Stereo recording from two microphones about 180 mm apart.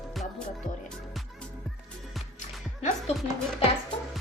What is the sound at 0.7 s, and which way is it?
Music, 45° left (ahead or behind).